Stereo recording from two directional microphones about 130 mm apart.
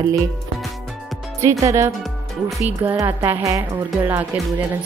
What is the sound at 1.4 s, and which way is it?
Speech, 25° right (ahead or behind).